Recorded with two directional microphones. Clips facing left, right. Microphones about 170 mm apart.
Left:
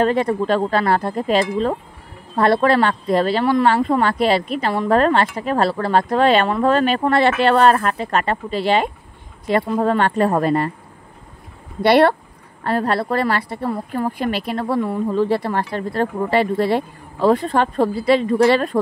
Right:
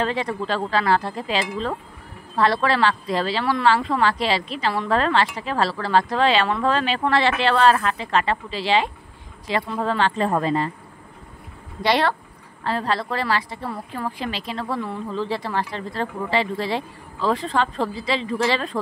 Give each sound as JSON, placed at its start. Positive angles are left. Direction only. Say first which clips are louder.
{"t": 0.0, "sound": "speech", "louder": "left 7 dB", "side_deg": 50}
{"t": 11.8, "sound": "speech", "louder": "left 7 dB", "side_deg": 60}